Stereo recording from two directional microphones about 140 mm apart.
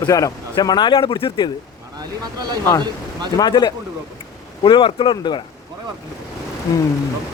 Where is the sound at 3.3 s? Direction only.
30° left (ahead or behind).